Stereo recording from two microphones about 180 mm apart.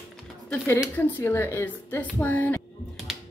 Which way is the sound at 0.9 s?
10° left (ahead or behind).